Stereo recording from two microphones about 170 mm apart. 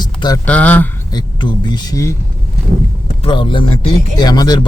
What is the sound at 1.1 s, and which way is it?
Speech, 25° left (ahead or behind).